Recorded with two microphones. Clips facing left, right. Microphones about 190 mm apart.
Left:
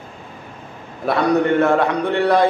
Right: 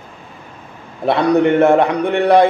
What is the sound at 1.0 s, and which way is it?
A man's voice, 25° right (ahead or behind).